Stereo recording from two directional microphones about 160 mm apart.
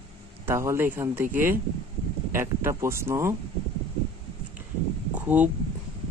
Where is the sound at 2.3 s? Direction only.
15° right (ahead or behind).